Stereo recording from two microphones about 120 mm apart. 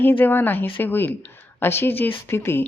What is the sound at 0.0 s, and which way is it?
Speech, 15° left (ahead or behind).